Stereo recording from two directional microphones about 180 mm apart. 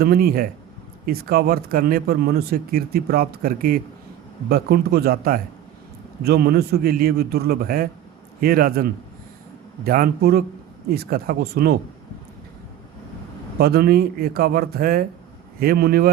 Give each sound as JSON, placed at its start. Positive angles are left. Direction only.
{"t": 0.0, "sound": "speech", "side_deg": -60}
{"t": 13.6, "sound": "speech", "side_deg": -60}